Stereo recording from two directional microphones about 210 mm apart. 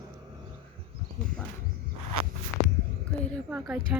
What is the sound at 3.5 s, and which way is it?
Speech, 5° right (ahead or behind).